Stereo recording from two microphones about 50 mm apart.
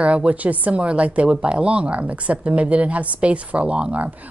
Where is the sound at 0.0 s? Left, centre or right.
Right.